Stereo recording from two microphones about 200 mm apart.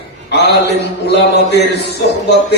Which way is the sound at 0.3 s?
55° left (ahead or behind).